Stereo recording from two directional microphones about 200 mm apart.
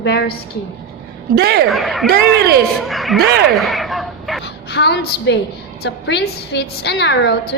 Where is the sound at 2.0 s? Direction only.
50° right (ahead or behind).